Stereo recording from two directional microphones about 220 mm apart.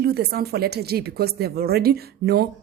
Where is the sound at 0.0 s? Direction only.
45° right (ahead or behind).